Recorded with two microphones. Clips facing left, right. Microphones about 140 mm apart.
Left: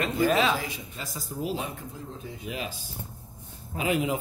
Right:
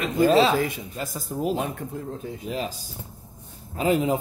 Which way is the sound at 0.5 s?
55° right (ahead or behind).